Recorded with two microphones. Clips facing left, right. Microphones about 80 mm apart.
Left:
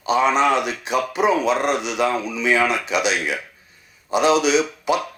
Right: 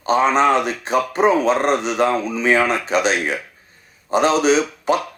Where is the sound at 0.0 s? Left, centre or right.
Right.